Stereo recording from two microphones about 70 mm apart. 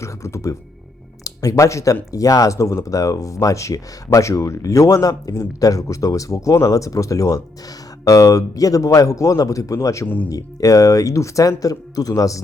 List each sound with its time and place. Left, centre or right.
0.0 s speech: left
1.2 s speech: left